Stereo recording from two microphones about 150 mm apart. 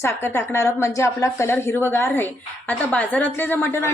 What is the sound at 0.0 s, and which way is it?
A woman's voice, 20° left (ahead or behind).